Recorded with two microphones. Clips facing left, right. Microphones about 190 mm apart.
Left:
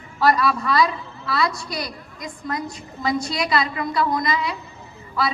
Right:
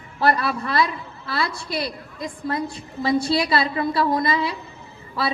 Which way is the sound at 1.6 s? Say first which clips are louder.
Right 3 dB; 30° right (ahead or behind).